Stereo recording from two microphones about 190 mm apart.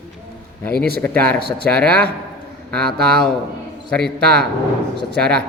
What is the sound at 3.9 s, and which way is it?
Speech, 5° left (ahead or behind).